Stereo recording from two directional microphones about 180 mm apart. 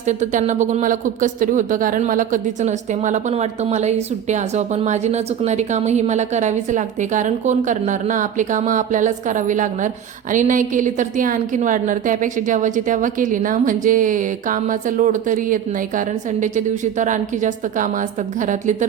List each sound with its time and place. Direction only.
0.0 s speech: 40° right (ahead or behind)